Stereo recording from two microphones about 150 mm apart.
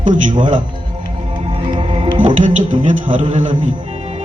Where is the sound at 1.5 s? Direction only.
35° right (ahead or behind).